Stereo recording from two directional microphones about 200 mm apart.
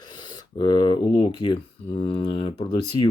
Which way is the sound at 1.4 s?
25° left (ahead or behind).